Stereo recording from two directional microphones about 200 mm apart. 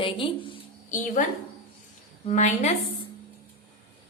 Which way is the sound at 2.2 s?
35° left (ahead or behind).